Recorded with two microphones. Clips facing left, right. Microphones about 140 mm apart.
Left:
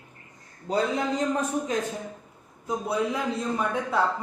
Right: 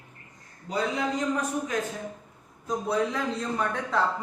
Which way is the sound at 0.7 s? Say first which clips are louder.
Left 4 dB; 35° left (ahead or behind).